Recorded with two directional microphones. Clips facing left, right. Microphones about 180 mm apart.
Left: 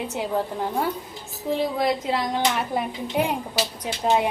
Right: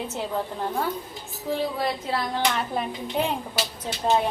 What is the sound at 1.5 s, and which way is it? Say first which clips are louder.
Speech: left 3 dB; 15° left (ahead or behind).